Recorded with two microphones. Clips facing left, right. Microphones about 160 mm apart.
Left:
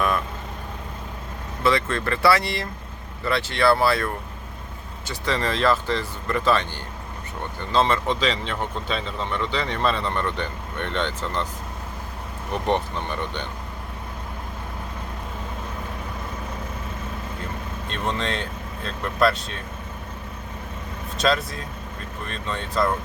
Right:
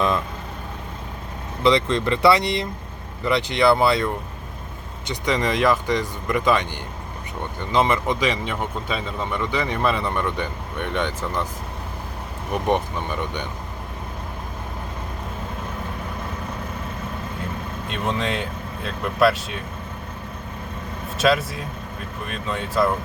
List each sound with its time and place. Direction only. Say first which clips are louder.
1.6 s speech: right 3 dB; 20° right (ahead or behind)
12.6 s speech: right 1 dB; 10° right (ahead or behind)
17.8 s speech: right 2 dB; 5° right (ahead or behind)
21.2 s speech: right 3 dB; 5° right (ahead or behind)